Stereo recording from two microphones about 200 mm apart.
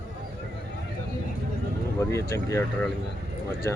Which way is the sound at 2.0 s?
15° left (ahead or behind).